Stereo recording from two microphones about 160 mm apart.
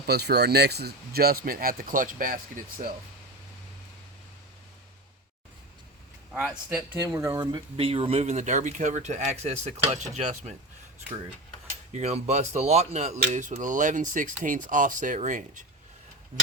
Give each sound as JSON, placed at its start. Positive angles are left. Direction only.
{"t": 0.0, "sound": "speech", "side_deg": -90}
{"t": 7.0, "sound": "speech", "side_deg": -20}
{"t": 11.9, "sound": "speech", "side_deg": -40}